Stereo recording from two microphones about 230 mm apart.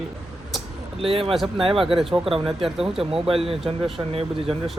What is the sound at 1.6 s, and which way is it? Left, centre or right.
Speech, right.